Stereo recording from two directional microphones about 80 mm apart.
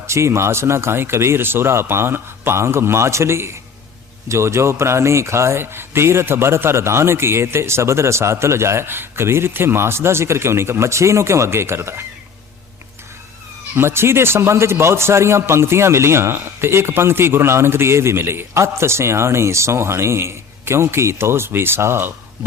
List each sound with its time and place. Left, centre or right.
0.1 s a man's voice: right
13.7 s a man's voice: right